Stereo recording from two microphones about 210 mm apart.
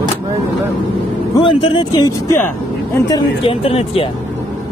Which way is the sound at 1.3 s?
25° left (ahead or behind).